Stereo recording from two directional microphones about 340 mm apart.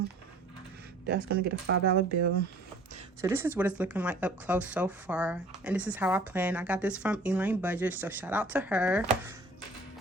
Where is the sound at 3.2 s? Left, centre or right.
Centre.